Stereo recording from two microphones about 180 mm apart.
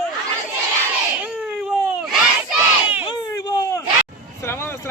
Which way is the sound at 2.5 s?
10° right (ahead or behind).